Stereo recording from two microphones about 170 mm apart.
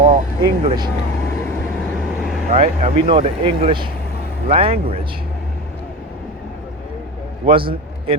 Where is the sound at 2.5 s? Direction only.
40° right (ahead or behind).